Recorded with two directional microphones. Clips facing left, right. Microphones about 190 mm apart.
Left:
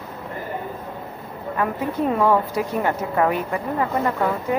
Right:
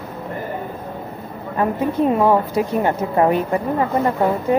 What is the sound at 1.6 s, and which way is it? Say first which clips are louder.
A woman's voice: right 5 dB; 20° right (ahead or behind).